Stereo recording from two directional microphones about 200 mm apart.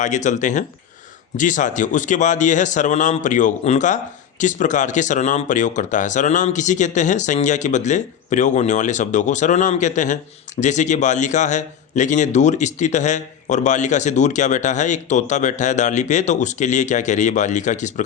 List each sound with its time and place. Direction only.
0.0 s a man's voice: 35° left (ahead or behind)